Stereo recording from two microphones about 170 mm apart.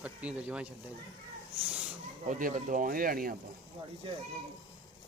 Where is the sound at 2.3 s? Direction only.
50° right (ahead or behind).